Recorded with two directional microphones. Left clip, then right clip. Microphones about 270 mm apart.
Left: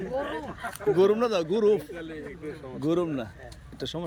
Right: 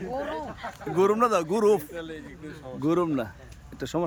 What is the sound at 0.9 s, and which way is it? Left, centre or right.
Speech, centre.